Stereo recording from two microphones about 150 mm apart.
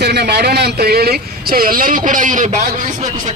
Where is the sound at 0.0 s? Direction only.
90° right.